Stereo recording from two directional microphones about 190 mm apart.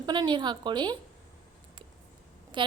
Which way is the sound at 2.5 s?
25° right (ahead or behind).